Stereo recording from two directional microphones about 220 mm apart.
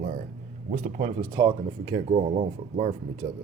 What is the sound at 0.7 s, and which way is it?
Speech, 35° right (ahead or behind).